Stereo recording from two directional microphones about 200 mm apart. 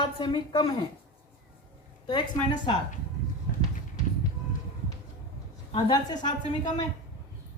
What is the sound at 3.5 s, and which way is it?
Clip-clop, 50° left (ahead or behind).